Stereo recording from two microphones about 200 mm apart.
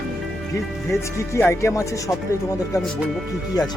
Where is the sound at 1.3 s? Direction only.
15° left (ahead or behind).